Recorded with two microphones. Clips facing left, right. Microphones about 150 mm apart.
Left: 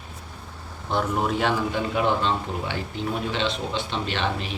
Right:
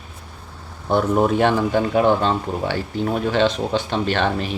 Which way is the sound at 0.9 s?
50° right (ahead or behind).